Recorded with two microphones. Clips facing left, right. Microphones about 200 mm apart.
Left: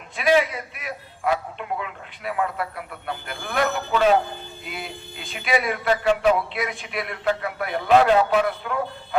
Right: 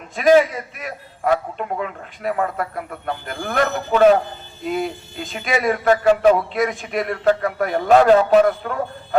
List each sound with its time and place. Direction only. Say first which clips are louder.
0.2 s speech: right 6 dB; 40° right (ahead or behind)